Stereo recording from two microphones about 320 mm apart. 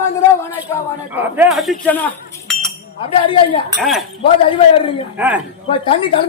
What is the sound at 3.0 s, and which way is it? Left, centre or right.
Speech, centre.